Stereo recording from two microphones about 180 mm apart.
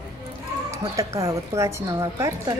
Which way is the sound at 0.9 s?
15° right (ahead or behind).